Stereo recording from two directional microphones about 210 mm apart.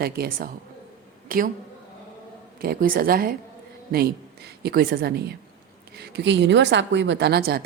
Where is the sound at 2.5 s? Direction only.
45° right (ahead or behind).